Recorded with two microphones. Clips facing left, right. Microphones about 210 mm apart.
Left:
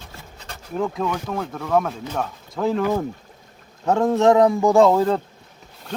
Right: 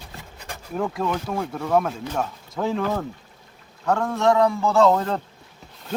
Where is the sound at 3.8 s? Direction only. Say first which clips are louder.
Left 4 dB; 20° left (ahead or behind).